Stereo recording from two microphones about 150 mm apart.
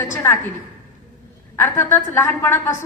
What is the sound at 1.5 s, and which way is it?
A woman's voice, 15° left (ahead or behind).